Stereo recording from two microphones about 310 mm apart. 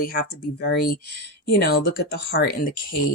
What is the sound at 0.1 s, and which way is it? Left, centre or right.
Speech, left.